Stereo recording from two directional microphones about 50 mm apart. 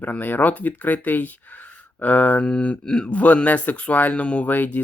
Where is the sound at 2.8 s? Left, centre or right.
Centre.